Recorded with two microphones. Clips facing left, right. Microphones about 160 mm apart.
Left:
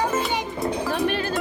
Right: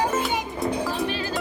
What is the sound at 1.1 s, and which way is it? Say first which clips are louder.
Music: left 3 dB; 60° left (ahead or behind).